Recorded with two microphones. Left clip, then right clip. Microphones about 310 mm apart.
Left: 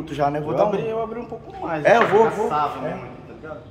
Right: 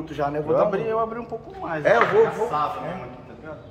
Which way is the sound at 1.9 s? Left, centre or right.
Left.